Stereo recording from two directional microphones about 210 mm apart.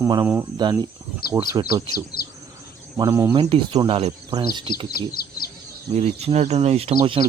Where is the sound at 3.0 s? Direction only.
15° right (ahead or behind).